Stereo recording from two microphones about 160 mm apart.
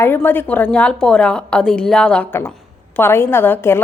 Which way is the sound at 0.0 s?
15° left (ahead or behind).